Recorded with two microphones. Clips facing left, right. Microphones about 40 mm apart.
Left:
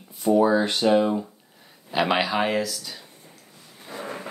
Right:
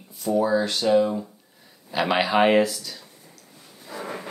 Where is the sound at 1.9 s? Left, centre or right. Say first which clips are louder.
Even; centre.